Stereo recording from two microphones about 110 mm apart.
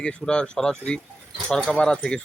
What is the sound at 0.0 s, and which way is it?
Speech, 10° left (ahead or behind).